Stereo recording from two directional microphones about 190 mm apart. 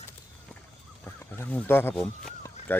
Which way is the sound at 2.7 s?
10° left (ahead or behind).